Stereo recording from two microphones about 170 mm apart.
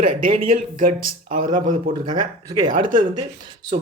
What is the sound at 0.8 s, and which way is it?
Speech, 50° right (ahead or behind).